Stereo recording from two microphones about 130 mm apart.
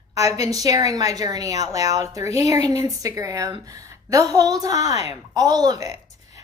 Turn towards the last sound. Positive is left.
turn(degrees=-25)  # may be behind; listen again after turning